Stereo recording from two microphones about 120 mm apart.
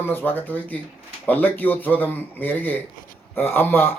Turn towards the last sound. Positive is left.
turn(degrees=15)  # may be behind; listen again after turning